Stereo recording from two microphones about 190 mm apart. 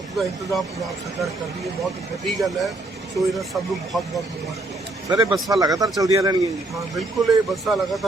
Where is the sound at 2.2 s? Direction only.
Centre (ahead or behind).